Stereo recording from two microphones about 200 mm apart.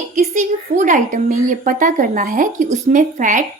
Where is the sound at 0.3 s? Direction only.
40° right (ahead or behind).